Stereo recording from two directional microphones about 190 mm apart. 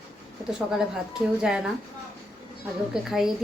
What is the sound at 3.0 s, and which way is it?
Speech, centre (ahead or behind).